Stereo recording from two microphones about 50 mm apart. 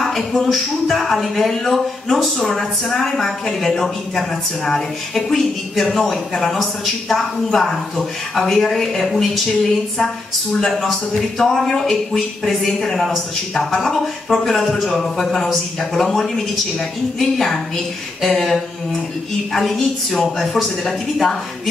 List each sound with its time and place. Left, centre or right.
0.0 s a woman's voice: centre
10.6 s a woman's voice: centre